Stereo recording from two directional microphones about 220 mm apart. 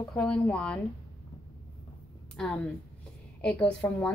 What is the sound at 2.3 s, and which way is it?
A woman's voice, 5° left (ahead or behind).